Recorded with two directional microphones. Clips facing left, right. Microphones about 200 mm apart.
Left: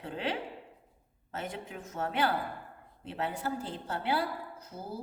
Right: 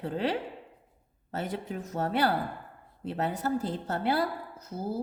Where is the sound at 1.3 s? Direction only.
35° right (ahead or behind).